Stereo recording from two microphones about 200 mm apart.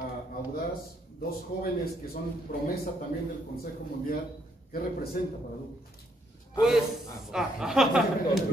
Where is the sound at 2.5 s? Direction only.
45° left (ahead or behind).